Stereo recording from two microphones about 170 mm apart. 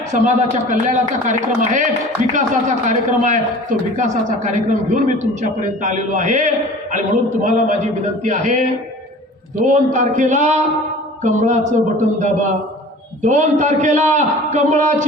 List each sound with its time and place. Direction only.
0.1 s a man's voice: 45° right (ahead or behind)
9.6 s a man's voice: 45° right (ahead or behind)